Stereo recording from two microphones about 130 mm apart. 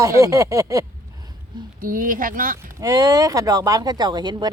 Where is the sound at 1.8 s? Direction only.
90° right.